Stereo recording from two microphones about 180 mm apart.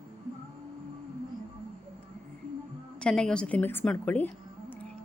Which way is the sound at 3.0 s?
5° left (ahead or behind).